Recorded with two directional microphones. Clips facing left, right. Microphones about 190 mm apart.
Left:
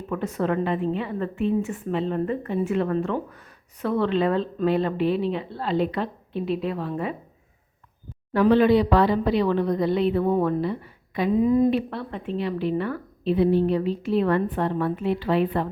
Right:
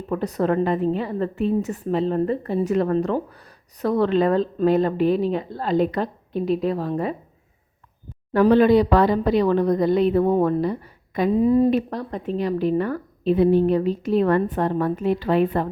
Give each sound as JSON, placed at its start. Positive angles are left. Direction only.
{"t": 0.1, "sound": "a woman's voice", "side_deg": -35}
{"t": 8.3, "sound": "speech", "side_deg": -45}